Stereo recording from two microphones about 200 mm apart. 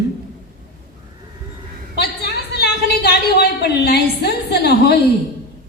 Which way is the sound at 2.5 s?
55° left (ahead or behind).